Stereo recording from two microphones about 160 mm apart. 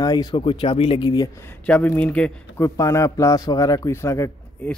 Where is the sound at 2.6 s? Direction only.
20° left (ahead or behind).